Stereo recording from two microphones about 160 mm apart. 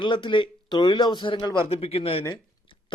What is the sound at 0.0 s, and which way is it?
A man's voice, 30° left (ahead or behind).